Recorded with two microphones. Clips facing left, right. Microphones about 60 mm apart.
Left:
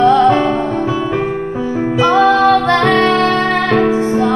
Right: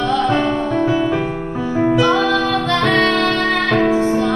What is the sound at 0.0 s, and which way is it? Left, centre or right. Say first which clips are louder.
Music: left 7 dB; left.